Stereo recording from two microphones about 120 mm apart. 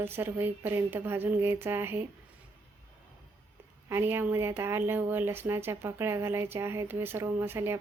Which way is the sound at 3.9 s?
20° right (ahead or behind).